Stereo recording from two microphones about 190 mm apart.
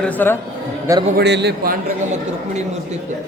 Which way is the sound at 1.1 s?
65° right (ahead or behind).